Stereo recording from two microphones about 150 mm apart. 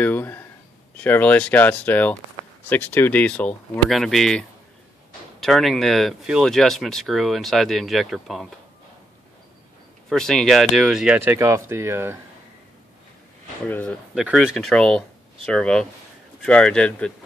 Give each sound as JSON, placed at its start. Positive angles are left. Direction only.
{"t": 0.0, "sound": "a sound", "side_deg": 10}
{"t": 0.9, "sound": "speech", "side_deg": 10}
{"t": 10.0, "sound": "speech", "side_deg": 5}
{"t": 11.2, "sound": "speech", "side_deg": -20}
{"t": 13.7, "sound": "speech", "side_deg": 10}
{"t": 14.1, "sound": "speech", "side_deg": -5}